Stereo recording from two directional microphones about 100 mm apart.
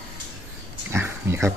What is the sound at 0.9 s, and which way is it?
Speech, 25° right (ahead or behind).